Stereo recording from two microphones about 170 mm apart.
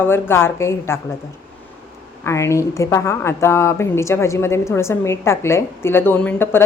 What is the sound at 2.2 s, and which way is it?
A woman's voice, 15° left (ahead or behind).